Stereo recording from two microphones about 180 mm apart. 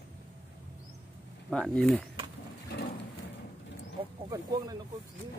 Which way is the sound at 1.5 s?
5° left (ahead or behind).